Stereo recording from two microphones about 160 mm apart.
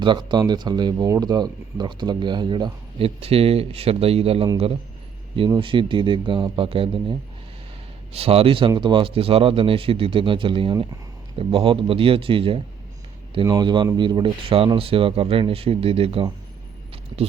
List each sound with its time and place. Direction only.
0.0 s speech: 30° right (ahead or behind)
5.5 s speech: 30° right (ahead or behind)
17.1 s speech: 25° right (ahead or behind)